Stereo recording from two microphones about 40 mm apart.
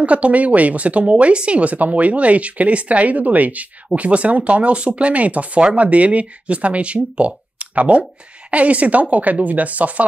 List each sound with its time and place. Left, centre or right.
0.0 s speech: right